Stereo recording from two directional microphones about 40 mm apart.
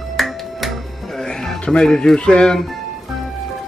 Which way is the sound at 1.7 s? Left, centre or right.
Centre.